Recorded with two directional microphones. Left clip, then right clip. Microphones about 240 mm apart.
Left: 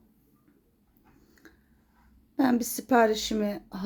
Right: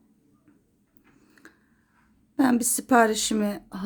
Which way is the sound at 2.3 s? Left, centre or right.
Centre.